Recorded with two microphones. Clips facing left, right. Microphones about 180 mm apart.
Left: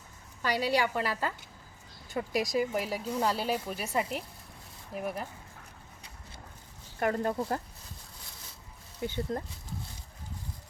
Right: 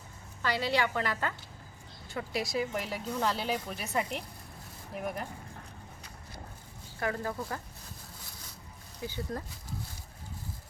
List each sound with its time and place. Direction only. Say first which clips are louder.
0.4 s speech: left 2 dB; 10° left (ahead or behind)
2.4 s speech: left 3 dB; 15° left (ahead or behind)
7.1 s speech: left 6 dB; 25° left (ahead or behind)
9.0 s speech: left 4 dB; 25° left (ahead or behind)